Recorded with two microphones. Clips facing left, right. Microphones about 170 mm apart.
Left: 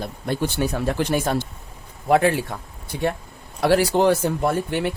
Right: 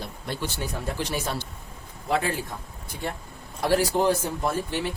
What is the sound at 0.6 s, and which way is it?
Speech, 65° left (ahead or behind).